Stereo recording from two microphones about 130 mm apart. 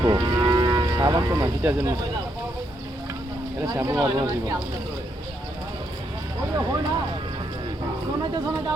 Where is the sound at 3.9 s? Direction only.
35° right (ahead or behind).